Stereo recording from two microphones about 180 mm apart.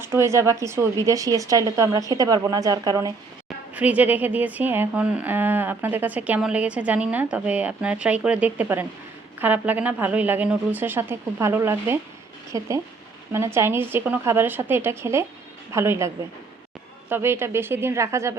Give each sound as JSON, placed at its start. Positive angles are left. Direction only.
{"t": 0.0, "sound": "speech", "side_deg": -15}
{"t": 3.8, "sound": "a woman's voice", "side_deg": -10}